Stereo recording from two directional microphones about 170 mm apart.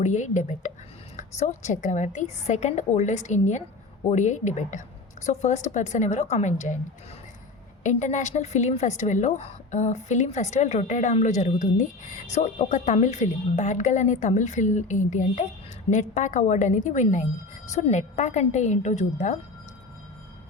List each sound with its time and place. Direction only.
0.0 s a woman's voice: 45° left (ahead or behind)
7.9 s a woman's voice: 45° left (ahead or behind)